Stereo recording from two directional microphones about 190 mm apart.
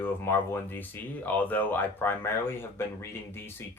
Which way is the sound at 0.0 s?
10° left (ahead or behind).